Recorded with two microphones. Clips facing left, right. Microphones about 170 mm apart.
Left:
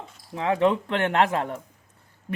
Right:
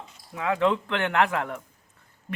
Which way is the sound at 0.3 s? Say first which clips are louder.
Left 2 dB; 30° left (ahead or behind).